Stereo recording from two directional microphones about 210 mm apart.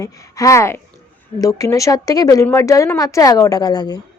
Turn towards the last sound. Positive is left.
turn(degrees=20)  # may be behind; listen again after turning